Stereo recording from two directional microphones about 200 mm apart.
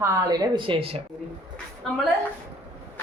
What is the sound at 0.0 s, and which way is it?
Speech, 15° right (ahead or behind).